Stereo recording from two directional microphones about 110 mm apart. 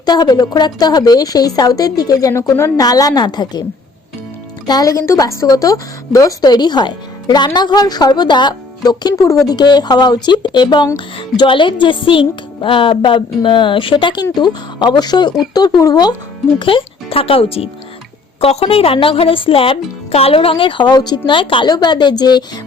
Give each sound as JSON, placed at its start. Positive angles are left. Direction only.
{"t": 0.0, "sound": "a woman's voice", "side_deg": 40}
{"t": 4.6, "sound": "a woman's voice", "side_deg": 35}
{"t": 16.6, "sound": "speech", "side_deg": 50}